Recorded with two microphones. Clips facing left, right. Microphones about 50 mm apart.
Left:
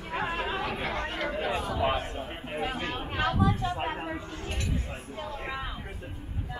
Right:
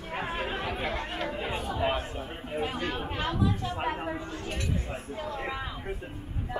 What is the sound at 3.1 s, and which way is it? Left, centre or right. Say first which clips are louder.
Speech: left 3 dB; left.